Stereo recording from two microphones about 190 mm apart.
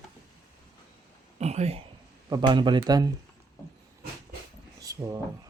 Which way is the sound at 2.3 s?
25° right (ahead or behind).